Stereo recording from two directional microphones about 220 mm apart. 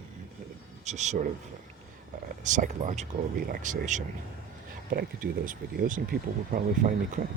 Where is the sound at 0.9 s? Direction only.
30° right (ahead or behind).